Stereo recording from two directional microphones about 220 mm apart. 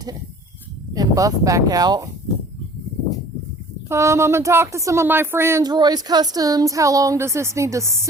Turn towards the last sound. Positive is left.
turn(degrees=-15)  # may be behind; listen again after turning